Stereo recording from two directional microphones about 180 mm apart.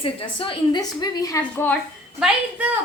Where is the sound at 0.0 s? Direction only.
30° left (ahead or behind).